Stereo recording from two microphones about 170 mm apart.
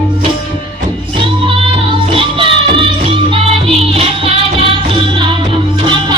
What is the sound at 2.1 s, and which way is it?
Music, 30° right (ahead or behind).